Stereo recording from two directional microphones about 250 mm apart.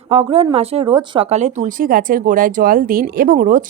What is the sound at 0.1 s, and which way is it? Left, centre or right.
A woman's voice, right.